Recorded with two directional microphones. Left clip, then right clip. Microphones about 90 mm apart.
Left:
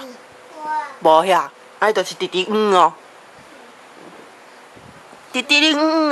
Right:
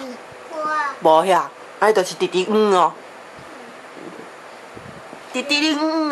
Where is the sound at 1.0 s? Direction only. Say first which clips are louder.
Left 1 dB; 20° left (ahead or behind).